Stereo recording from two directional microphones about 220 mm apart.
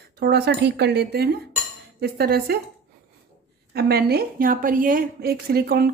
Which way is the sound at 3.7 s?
45° right (ahead or behind).